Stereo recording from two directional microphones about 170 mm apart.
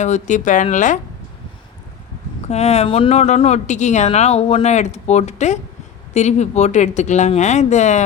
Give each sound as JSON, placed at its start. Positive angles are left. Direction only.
{"t": 0.0, "sound": "speech", "side_deg": 45}
{"t": 2.5, "sound": "speech", "side_deg": 40}